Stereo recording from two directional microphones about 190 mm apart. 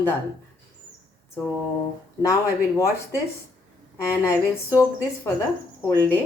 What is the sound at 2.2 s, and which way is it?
Speech, 15° left (ahead or behind).